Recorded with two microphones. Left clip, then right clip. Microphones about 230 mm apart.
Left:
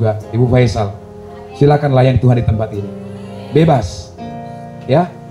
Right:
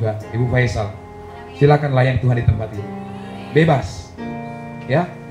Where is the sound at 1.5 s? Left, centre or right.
Left.